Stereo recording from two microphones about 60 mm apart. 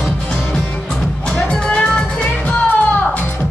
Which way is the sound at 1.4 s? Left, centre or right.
Centre.